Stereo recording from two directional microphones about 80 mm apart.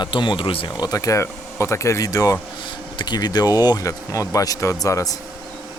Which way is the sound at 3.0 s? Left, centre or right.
Left.